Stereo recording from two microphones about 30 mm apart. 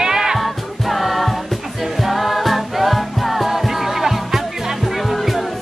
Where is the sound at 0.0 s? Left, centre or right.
Centre.